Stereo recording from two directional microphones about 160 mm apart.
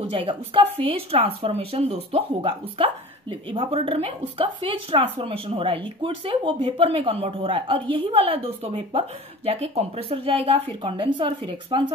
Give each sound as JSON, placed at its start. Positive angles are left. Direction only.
{"t": 0.0, "sound": "speech", "side_deg": -30}